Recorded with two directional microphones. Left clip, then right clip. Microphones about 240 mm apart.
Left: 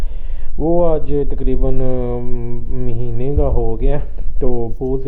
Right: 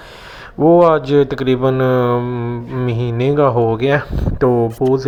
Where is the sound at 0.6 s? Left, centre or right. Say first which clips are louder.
Right 6 dB; right.